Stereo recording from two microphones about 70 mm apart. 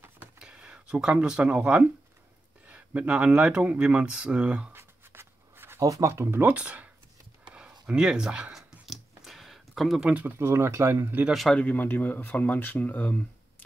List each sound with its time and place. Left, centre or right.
0.4 s speech: centre
4.7 s writing: right
5.8 s speech: right
6.4 s speech: centre
7.4 s a sound: centre
8.5 s a sound: centre
10.2 s speech: right
11.5 s speech: left